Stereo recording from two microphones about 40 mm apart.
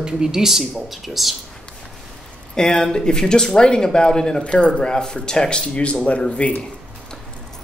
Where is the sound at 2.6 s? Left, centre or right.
Centre.